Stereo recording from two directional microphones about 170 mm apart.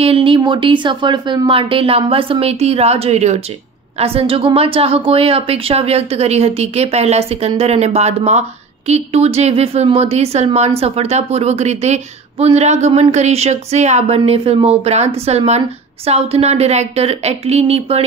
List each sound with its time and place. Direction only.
0.0 s a woman's voice: 35° right (ahead or behind)